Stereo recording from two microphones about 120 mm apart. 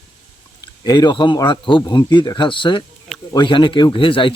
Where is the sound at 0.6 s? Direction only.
35° left (ahead or behind).